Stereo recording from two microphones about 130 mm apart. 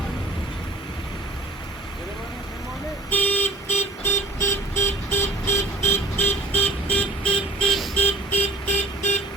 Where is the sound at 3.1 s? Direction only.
15° left (ahead or behind).